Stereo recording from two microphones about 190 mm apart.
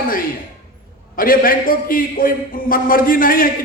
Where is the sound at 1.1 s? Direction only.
50° left (ahead or behind).